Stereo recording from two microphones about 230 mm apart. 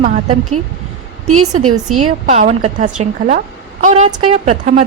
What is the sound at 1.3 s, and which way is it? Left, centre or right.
Speech, right.